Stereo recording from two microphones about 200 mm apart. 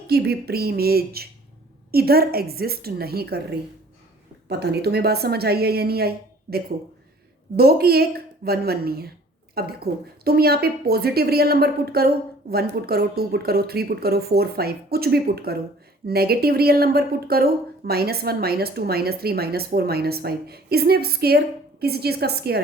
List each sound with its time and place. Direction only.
0.1 s speech: 55° right (ahead or behind)